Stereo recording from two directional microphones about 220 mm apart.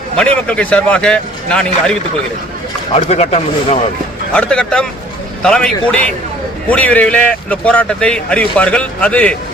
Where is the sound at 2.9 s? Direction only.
30° left (ahead or behind).